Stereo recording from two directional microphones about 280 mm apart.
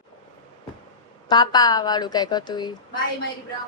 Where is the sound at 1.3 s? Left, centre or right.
Centre.